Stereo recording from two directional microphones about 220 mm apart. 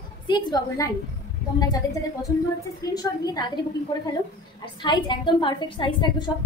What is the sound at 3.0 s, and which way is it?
A woman's voice, 20° left (ahead or behind).